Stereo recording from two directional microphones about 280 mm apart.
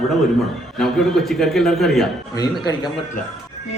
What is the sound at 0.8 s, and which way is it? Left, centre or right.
A man's voice, centre.